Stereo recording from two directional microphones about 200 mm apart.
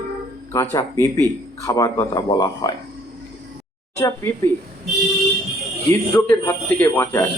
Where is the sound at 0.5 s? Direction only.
15° left (ahead or behind).